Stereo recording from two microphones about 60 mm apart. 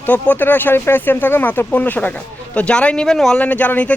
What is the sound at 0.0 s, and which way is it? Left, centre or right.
Speech, left.